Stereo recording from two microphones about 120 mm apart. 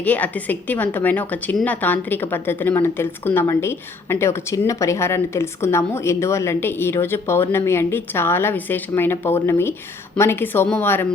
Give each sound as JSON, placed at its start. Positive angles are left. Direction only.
{"t": 0.0, "sound": "a woman's voice", "side_deg": 15}